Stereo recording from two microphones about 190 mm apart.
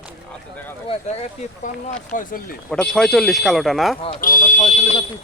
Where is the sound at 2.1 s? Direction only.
50° left (ahead or behind).